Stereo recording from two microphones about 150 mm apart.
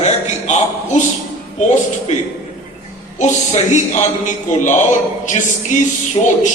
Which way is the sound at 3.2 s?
50° left (ahead or behind).